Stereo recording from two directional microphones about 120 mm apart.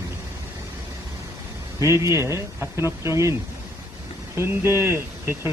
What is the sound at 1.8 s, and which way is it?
Speech, 25° right (ahead or behind).